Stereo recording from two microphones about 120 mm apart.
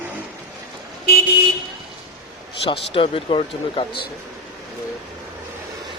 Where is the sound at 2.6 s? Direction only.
50° left (ahead or behind).